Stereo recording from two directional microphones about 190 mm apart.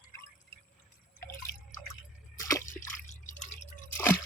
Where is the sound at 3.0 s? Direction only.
40° left (ahead or behind).